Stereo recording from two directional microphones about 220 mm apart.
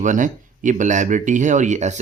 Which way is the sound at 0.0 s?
35° right (ahead or behind).